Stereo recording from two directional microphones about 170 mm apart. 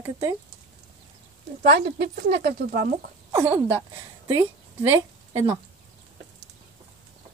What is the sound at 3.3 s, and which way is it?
Speech, 15° right (ahead or behind).